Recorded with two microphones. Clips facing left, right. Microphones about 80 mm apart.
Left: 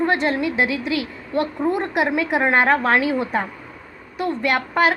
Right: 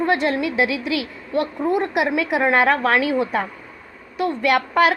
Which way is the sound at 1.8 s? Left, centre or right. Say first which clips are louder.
Even; left.